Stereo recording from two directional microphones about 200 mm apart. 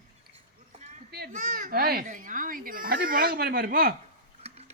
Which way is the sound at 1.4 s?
40° right (ahead or behind).